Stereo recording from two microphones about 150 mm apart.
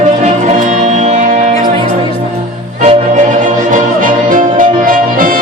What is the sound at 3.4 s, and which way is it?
Music, 60° right (ahead or behind).